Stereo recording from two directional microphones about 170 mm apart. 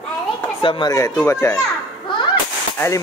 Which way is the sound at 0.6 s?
30° left (ahead or behind).